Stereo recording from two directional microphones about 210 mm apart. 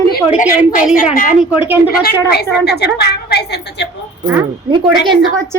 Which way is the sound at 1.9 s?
45° left (ahead or behind).